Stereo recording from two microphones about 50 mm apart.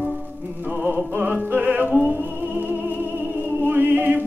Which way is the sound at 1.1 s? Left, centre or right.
Right.